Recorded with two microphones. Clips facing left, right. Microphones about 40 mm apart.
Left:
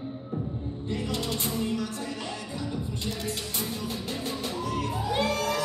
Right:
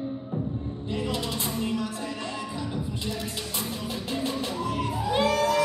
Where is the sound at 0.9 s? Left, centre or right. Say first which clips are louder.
Right 1 dB; right.